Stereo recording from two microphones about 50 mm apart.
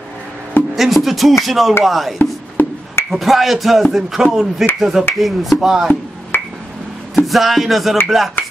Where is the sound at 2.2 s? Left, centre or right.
Left.